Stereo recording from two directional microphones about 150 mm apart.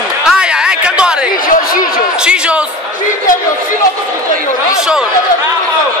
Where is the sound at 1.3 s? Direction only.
65° left (ahead or behind).